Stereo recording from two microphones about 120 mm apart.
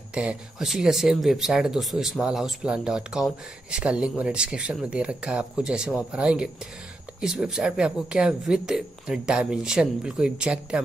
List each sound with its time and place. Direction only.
0.1 s speech: 10° right (ahead or behind)